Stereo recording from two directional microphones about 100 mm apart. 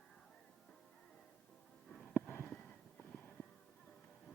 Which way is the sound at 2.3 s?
20° left (ahead or behind).